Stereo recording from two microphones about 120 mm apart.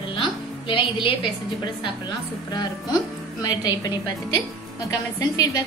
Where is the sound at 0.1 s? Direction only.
45° left (ahead or behind).